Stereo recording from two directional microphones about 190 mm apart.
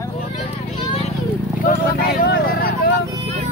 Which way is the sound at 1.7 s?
55° left (ahead or behind).